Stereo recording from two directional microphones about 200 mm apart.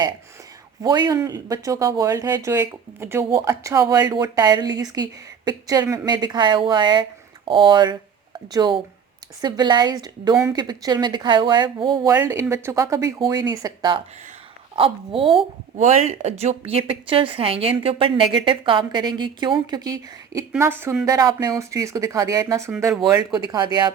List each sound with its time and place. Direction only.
0.8 s a woman's voice: 20° right (ahead or behind)